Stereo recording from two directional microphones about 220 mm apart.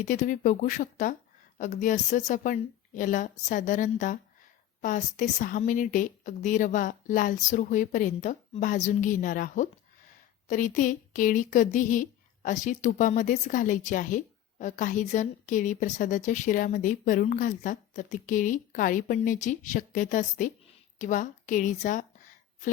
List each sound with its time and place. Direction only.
0.0 s a woman's voice: 35° left (ahead or behind)